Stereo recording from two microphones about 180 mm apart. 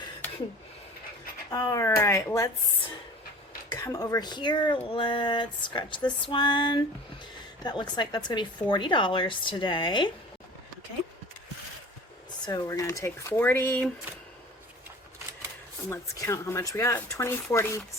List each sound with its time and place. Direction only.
1.5 s speech: 20° left (ahead or behind)
3.8 s speech: 20° left (ahead or behind)
12.5 s speech: 20° left (ahead or behind)
15.9 s speech: 15° left (ahead or behind)